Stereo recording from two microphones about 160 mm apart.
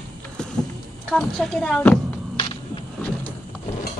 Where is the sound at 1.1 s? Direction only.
5° left (ahead or behind).